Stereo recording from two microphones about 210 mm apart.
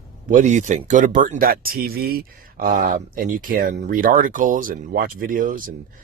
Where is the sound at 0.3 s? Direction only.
35° right (ahead or behind).